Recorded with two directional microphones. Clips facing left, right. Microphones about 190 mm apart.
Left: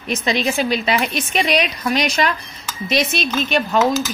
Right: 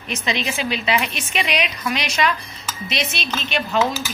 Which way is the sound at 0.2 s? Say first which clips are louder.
Left 5 dB; 40° left (ahead or behind).